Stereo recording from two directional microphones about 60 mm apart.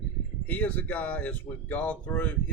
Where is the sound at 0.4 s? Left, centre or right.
Left.